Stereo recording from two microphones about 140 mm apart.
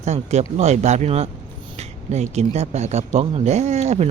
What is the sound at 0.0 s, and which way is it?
Speech, 55° right (ahead or behind).